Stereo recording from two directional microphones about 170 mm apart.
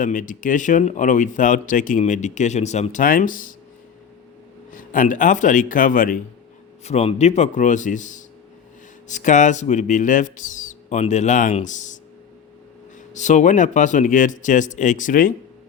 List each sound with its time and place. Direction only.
0.0 s speech: 50° left (ahead or behind)
4.7 s speech: 50° left (ahead or behind)
6.8 s speech: 40° left (ahead or behind)
13.1 s speech: 45° left (ahead or behind)